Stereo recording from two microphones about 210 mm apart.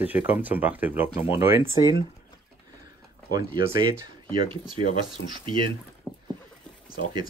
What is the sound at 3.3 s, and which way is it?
Speech, 15° right (ahead or behind).